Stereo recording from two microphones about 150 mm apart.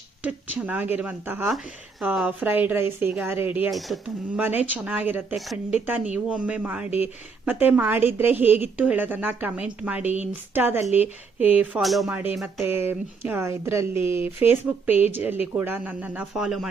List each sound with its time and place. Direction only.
0.2 s a woman's voice: 10° right (ahead or behind)
1.5 s a woman's voice: centre (ahead or behind)
3.7 s speech: centre (ahead or behind)
4.4 s a woman's voice: 10° right (ahead or behind)
11.8 s speech: centre (ahead or behind)
12.1 s a woman's voice: 10° right (ahead or behind)